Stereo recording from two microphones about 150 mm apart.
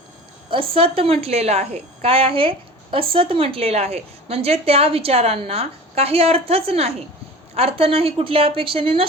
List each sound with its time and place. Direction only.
0.5 s a woman's voice: 35° right (ahead or behind)